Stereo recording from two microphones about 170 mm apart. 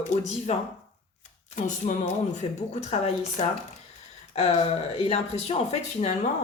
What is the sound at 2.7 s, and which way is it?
Speech, 40° left (ahead or behind).